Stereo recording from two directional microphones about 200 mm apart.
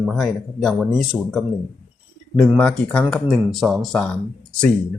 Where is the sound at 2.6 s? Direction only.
5° left (ahead or behind).